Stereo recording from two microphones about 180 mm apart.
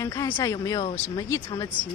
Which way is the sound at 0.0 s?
15° left (ahead or behind).